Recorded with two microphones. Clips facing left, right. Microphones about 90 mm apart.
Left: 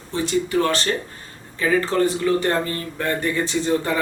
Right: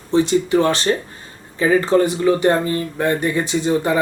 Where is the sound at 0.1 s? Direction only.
20° right (ahead or behind).